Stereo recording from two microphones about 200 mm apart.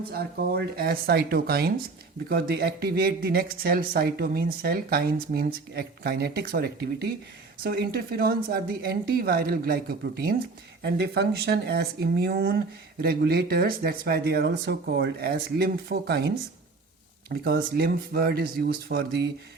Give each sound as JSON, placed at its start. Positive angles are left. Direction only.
{"t": 0.1, "sound": "speech", "side_deg": -50}